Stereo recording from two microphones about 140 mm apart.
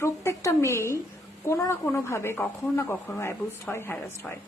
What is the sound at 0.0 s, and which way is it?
A woman's voice, 20° left (ahead or behind).